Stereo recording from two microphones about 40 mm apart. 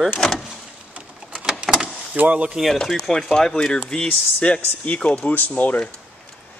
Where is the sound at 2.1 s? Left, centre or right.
Right.